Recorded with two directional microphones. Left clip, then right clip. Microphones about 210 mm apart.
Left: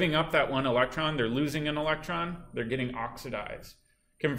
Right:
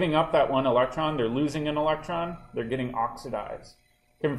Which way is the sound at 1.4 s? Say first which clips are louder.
Right 4 dB; 5° right (ahead or behind).